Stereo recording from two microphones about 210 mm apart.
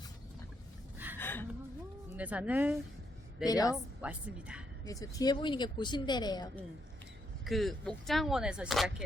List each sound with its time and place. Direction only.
1.2 s a sound: 10° left (ahead or behind)
2.1 s speech: 5° right (ahead or behind)
3.4 s speech: 15° left (ahead or behind)
4.0 s speech: 5° right (ahead or behind)
4.9 s speech: 15° left (ahead or behind)
7.4 s speech: centre (ahead or behind)